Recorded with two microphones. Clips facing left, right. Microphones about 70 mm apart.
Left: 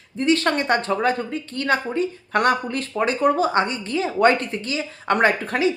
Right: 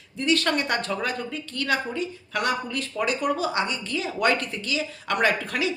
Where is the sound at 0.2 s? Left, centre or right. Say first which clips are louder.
Left 4 dB; left.